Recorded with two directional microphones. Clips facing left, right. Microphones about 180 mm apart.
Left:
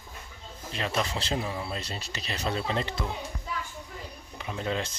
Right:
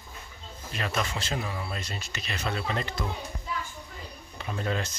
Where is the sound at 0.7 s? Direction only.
25° left (ahead or behind).